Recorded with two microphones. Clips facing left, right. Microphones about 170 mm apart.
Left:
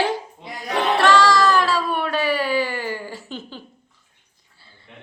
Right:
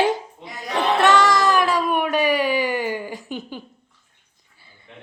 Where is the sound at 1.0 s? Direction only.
20° right (ahead or behind).